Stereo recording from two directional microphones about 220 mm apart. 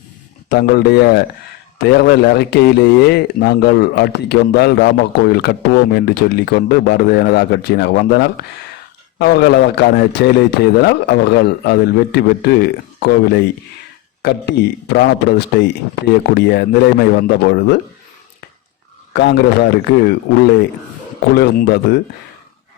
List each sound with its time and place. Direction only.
0.4 s a man's voice: 45° left (ahead or behind)
19.1 s a man's voice: 50° left (ahead or behind)
21.3 s a man's voice: 50° left (ahead or behind)